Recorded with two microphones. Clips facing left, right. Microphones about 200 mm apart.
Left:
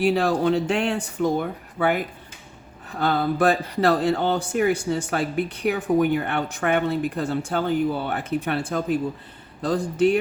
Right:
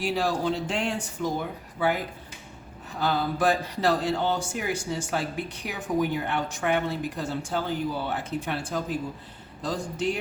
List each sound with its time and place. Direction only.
0.0 s speech: 60° left (ahead or behind)